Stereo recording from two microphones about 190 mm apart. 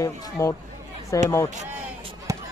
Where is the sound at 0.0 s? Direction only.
15° left (ahead or behind).